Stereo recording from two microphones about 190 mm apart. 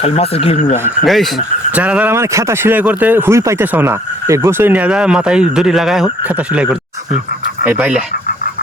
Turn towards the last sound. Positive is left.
turn(degrees=-10)  # may be behind; listen again after turning